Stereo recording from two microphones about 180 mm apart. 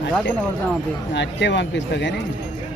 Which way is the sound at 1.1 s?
75° left (ahead or behind).